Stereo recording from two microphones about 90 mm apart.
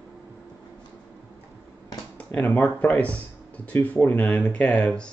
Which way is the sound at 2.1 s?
15° left (ahead or behind).